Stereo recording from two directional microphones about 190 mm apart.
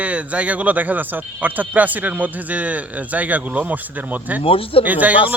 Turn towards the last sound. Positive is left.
turn(degrees=-10)  # may be behind; listen again after turning